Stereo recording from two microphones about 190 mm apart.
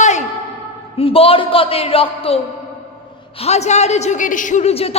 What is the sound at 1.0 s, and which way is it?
Speech, 30° left (ahead or behind).